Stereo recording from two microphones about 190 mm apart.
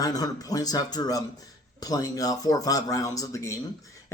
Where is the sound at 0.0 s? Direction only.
20° left (ahead or behind).